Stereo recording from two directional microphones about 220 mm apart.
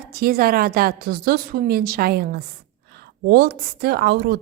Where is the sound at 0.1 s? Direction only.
45° right (ahead or behind).